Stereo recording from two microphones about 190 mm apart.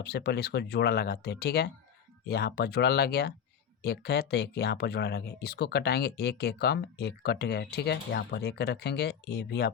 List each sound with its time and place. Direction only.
0.0 s speech: 60° left (ahead or behind)